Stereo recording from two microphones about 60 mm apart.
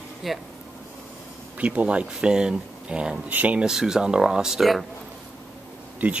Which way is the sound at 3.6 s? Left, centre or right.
Centre.